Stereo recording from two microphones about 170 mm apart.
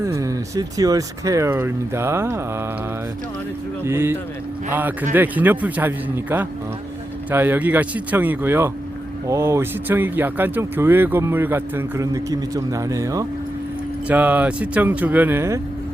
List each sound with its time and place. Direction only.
0.0 s speech: 20° right (ahead or behind)
3.8 s speech: 15° right (ahead or behind)
7.3 s speech: 10° right (ahead or behind)
14.1 s speech: 10° right (ahead or behind)